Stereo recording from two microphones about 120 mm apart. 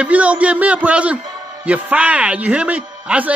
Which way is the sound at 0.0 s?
10° right (ahead or behind).